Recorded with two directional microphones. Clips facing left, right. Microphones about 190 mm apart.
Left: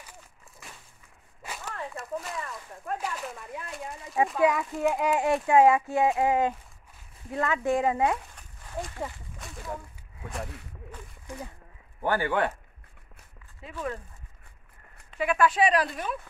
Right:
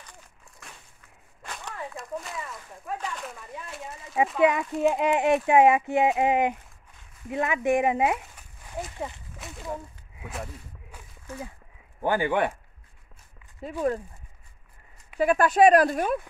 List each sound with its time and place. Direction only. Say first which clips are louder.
0.6 s a sound: even; centre (ahead or behind)
4.4 s speech: right 4 dB; 20° right (ahead or behind)
8.4 s a sound: even; 5° right (ahead or behind)
10.2 s speech: even; centre (ahead or behind)
11.3 s speech: right 2 dB; 15° left (ahead or behind)
12.0 s speech: right 2 dB; 15° right (ahead or behind)
13.6 s speech: right 8 dB; 40° right (ahead or behind)
15.1 s speech: right 4 dB; 40° right (ahead or behind)